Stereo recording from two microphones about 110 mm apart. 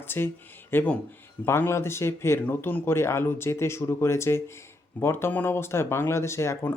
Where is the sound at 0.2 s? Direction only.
20° left (ahead or behind).